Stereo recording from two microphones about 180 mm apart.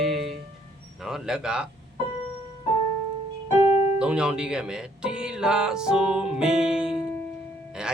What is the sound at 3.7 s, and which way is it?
Piano, 35° left (ahead or behind).